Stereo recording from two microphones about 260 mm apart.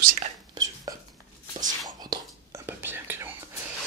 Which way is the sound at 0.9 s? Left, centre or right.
Centre.